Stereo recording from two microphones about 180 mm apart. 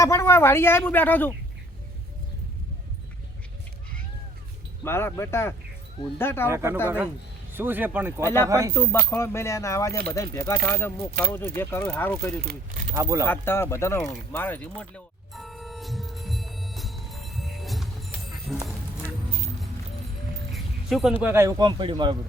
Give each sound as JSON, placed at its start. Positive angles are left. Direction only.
{"t": 0.0, "sound": "speech", "side_deg": 15}
{"t": 4.8, "sound": "speech", "side_deg": 15}
{"t": 6.5, "sound": "speech", "side_deg": -15}
{"t": 8.2, "sound": "speech", "side_deg": 15}
{"t": 8.4, "sound": "speech", "side_deg": -20}
{"t": 8.7, "sound": "speech", "side_deg": 10}
{"t": 12.4, "sound": "speech", "side_deg": -55}
{"t": 12.9, "sound": "speech", "side_deg": -15}
{"t": 13.2, "sound": "speech", "side_deg": 10}
{"t": 14.3, "sound": "music", "side_deg": 10}
{"t": 20.5, "sound": "a sound", "side_deg": 0}
{"t": 21.2, "sound": "speech", "side_deg": -10}